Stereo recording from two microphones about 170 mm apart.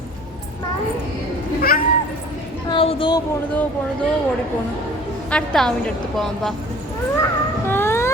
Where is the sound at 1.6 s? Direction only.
60° left (ahead or behind).